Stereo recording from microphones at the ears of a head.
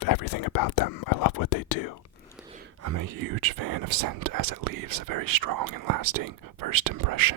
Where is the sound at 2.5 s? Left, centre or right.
Right.